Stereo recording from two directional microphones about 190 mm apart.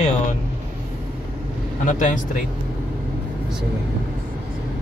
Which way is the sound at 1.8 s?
45° left (ahead or behind).